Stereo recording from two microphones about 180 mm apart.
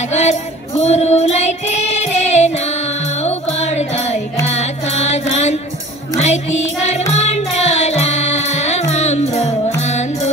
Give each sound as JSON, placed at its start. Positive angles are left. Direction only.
{"t": 0.1, "sound": "music", "side_deg": 40}
{"t": 4.5, "sound": "carnatic music", "side_deg": 35}
{"t": 6.1, "sound": "music", "side_deg": 40}